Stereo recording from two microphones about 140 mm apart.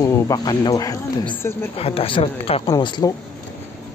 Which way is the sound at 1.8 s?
45° left (ahead or behind).